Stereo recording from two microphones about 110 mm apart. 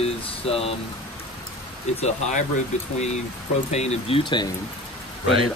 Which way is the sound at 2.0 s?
90° left.